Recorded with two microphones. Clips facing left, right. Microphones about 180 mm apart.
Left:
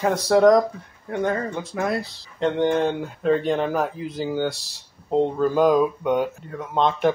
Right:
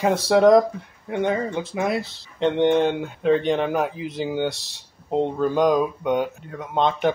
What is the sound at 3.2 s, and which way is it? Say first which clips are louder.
Speech: right 1 dB; centre (ahead or behind).